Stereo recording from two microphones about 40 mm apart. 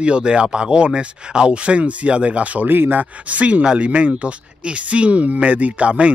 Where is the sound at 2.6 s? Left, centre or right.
Right.